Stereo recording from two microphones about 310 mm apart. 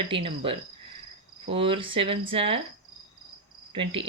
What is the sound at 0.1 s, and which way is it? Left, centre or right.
Speech, centre.